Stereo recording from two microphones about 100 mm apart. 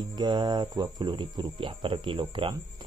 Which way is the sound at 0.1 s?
50° right (ahead or behind).